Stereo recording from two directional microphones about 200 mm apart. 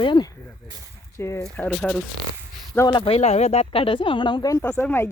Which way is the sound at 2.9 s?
25° left (ahead or behind).